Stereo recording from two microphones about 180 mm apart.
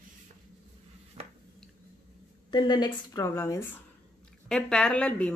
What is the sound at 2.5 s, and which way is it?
A woman's voice, 25° left (ahead or behind).